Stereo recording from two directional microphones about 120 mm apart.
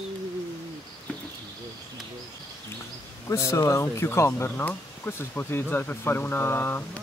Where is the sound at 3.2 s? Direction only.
25° left (ahead or behind).